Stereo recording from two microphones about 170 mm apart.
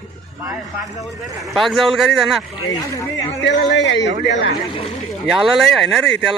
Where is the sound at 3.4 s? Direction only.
90° left.